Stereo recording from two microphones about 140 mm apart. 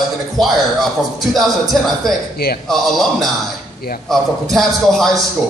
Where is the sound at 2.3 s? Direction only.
90° left.